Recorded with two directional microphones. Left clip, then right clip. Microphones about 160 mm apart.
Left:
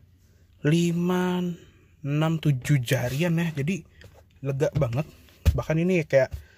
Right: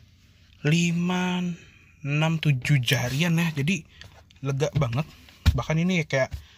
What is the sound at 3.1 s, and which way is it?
Speech, 25° left (ahead or behind).